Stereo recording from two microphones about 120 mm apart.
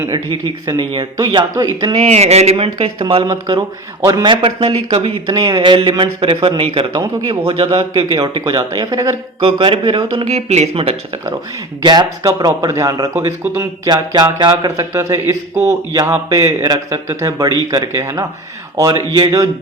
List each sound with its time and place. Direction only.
1.2 s a man's voice: 40° right (ahead or behind)
2.0 s a man's voice: 65° right (ahead or behind)
3.2 s a man's voice: 35° right (ahead or behind); by 7.9 s 55° right (ahead or behind)
7.9 s a man's voice: 40° right (ahead or behind)
9.4 s a man's voice: 50° right (ahead or behind)
10.2 s speech: 65° right (ahead or behind)
11.8 s a man's voice: 35° right (ahead or behind); by 13.7 s 20° right (ahead or behind)
13.8 s a man's voice: 35° right (ahead or behind)